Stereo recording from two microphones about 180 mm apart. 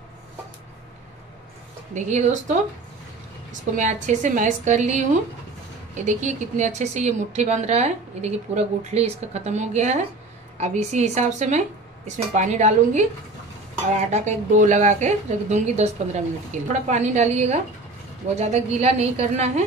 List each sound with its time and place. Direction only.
2.0 s a woman's voice: 40° right (ahead or behind)
3.7 s a woman's voice: 45° right (ahead or behind)